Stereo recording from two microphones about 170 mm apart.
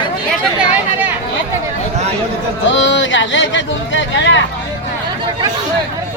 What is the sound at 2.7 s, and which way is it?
Speech, 90° left.